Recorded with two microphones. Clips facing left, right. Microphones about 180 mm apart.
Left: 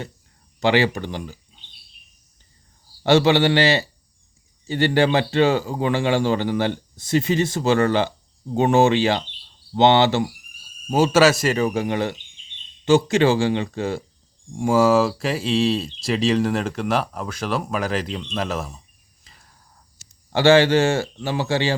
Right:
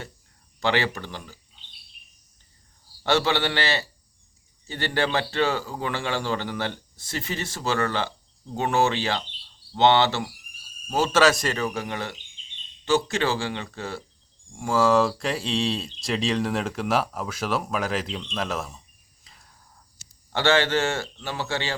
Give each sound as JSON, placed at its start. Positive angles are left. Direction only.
{"t": 0.6, "sound": "speech", "side_deg": 15}
{"t": 3.0, "sound": "speech", "side_deg": 20}
{"t": 14.8, "sound": "speech", "side_deg": 5}
{"t": 19.2, "sound": "cricket", "side_deg": 0}
{"t": 20.3, "sound": "speech", "side_deg": 10}